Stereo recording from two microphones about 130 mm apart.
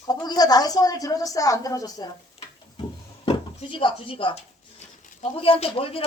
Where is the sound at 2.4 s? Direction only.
50° left (ahead or behind).